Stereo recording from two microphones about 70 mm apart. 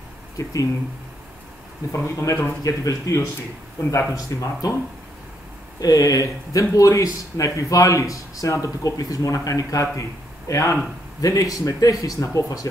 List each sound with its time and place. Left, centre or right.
0.4 s speech: left
1.9 s speech: left
2.6 s speech: left
5.8 s speech: left
11.1 s speech: left